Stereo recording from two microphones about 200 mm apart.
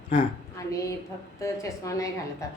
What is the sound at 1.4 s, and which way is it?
Speech, 15° left (ahead or behind).